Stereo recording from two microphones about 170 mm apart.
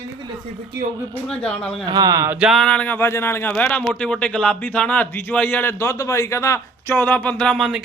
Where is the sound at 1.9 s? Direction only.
25° right (ahead or behind).